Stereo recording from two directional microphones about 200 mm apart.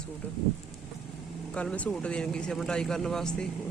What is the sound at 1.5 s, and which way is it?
Speech, 5° left (ahead or behind).